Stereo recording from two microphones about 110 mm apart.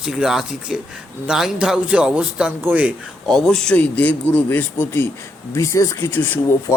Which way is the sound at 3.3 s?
5° left (ahead or behind).